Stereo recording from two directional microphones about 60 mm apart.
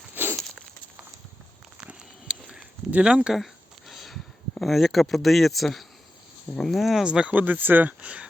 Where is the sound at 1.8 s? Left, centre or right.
Centre.